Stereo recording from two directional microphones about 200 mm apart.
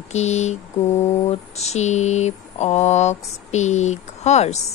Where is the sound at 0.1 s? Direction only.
35° left (ahead or behind).